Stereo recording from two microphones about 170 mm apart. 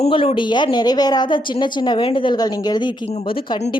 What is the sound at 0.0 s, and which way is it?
A woman's voice, 35° left (ahead or behind).